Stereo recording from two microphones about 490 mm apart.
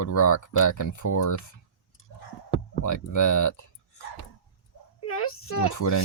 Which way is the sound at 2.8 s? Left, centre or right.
Left.